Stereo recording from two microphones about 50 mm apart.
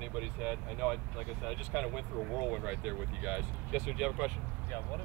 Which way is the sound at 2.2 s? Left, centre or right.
Centre.